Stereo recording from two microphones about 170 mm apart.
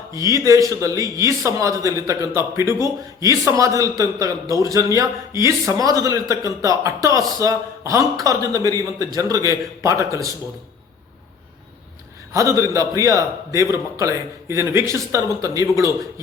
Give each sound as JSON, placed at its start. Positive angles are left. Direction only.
{"t": 0.1, "sound": "a man's voice", "side_deg": -20}
{"t": 12.3, "sound": "a man's voice", "side_deg": -20}